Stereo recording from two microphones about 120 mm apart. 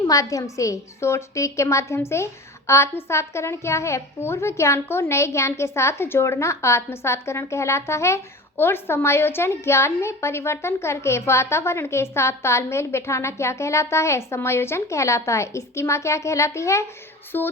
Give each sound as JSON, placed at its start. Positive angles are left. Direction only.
{"t": 0.1, "sound": "a woman's voice", "side_deg": 30}
{"t": 17.3, "sound": "music", "side_deg": 20}